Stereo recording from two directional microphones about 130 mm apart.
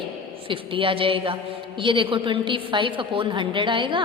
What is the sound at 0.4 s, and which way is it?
A woman's voice, 40° right (ahead or behind).